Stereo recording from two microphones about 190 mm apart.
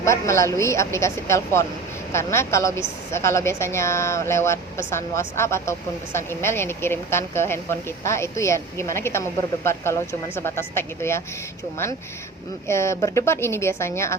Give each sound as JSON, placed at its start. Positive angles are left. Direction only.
{"t": 0.0, "sound": "a woman's voice", "side_deg": 15}
{"t": 12.6, "sound": "a woman's voice", "side_deg": 15}